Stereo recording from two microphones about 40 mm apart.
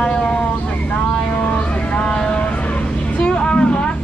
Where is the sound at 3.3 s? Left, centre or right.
Left.